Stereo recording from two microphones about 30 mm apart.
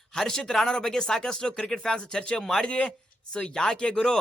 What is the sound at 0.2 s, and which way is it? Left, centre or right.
Speech, centre.